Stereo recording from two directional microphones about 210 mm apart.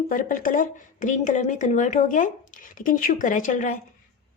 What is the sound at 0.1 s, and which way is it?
Speech, 40° left (ahead or behind).